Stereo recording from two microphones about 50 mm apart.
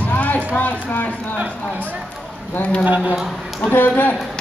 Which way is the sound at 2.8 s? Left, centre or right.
Right.